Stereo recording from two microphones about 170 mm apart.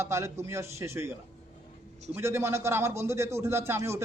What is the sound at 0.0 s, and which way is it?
Speech, 15° right (ahead or behind).